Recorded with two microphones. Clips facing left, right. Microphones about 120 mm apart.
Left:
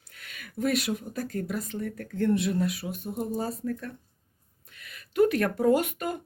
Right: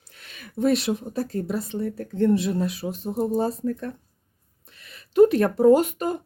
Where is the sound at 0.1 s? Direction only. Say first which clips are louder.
Right 3 dB; 25° right (ahead or behind).